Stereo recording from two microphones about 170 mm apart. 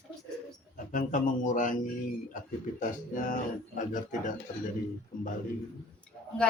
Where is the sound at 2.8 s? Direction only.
50° left (ahead or behind).